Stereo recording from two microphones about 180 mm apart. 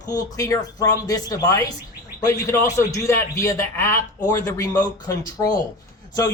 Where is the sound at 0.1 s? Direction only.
20° left (ahead or behind).